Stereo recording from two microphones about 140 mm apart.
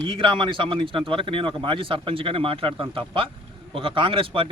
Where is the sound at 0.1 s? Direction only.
35° right (ahead or behind).